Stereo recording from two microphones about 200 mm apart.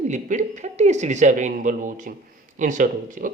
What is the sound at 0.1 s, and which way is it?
Speech, 35° right (ahead or behind).